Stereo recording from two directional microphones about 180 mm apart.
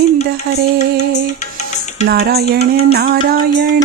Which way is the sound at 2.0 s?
60° right (ahead or behind).